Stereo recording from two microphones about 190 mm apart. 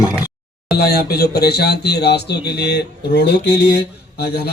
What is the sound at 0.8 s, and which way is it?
A man's voice, 55° left (ahead or behind).